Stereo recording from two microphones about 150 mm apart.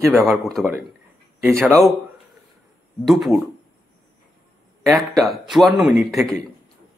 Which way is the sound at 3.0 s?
Centre (ahead or behind).